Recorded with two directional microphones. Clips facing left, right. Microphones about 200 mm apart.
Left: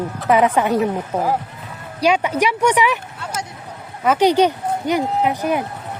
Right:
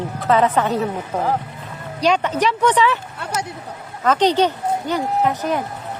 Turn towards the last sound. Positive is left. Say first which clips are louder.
# left 1 dB
turn(degrees=10)  # may be behind; listen again after turning